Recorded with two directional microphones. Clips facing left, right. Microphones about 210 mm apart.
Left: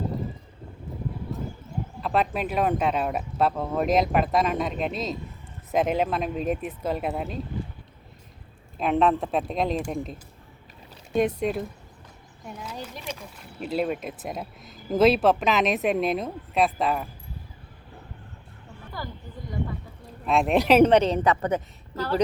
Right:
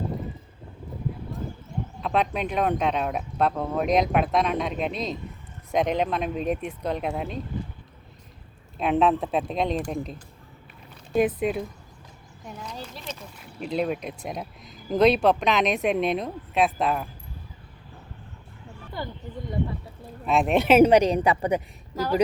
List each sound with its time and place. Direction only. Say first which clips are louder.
2.0 s speech: even; centre (ahead or behind)
8.8 s speech: even; centre (ahead or behind)
19.0 s a sound: right 3 dB; 25° right (ahead or behind)
20.2 s a woman's voice: even; centre (ahead or behind)